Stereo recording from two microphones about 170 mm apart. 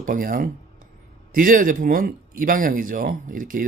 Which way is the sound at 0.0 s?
55° right (ahead or behind).